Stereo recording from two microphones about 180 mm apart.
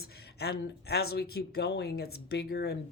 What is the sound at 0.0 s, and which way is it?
Speech, 60° left (ahead or behind).